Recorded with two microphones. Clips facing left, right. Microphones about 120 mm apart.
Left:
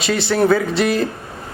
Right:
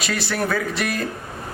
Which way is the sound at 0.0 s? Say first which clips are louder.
Left 8 dB; 25° left (ahead or behind).